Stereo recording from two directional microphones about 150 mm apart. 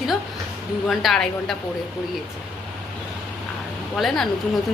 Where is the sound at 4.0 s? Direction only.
Centre (ahead or behind).